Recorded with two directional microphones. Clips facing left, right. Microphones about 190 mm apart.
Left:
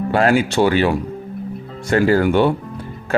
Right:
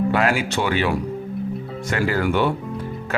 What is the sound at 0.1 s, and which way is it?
Speech, 30° left (ahead or behind).